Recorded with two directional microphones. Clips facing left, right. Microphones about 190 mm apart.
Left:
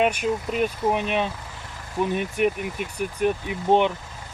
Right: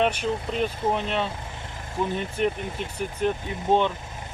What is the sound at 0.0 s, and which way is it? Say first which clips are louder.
Speech: left 2 dB; 10° left (ahead or behind).